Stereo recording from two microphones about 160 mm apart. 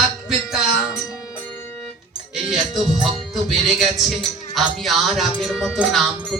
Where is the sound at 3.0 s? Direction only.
Centre (ahead or behind).